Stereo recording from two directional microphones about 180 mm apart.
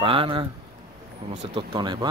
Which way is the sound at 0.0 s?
30° right (ahead or behind).